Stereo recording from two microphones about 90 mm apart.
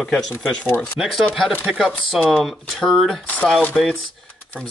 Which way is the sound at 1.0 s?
10° right (ahead or behind).